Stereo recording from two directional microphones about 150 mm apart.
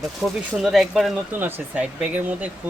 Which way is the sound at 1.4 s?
10° right (ahead or behind).